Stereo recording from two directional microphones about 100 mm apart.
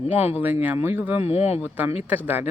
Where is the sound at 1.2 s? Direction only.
90° left.